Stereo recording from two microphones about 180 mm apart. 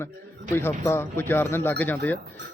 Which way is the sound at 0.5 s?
15° left (ahead or behind).